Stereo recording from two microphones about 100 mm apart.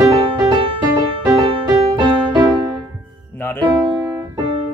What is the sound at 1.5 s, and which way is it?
Music, 65° right (ahead or behind).